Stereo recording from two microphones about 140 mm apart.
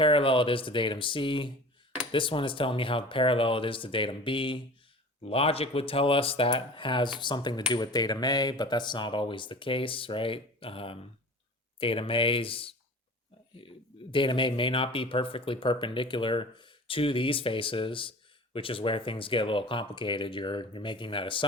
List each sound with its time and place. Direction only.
0.0 s speech: 40° left (ahead or behind)
14.1 s speech: 35° left (ahead or behind)